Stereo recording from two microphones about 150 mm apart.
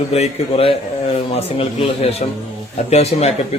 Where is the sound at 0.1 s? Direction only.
45° left (ahead or behind).